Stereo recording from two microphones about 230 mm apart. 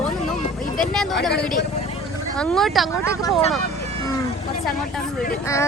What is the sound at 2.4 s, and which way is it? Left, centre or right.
Speech, centre.